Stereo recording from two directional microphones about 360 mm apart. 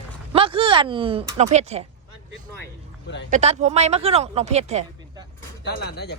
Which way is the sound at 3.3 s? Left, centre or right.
Centre.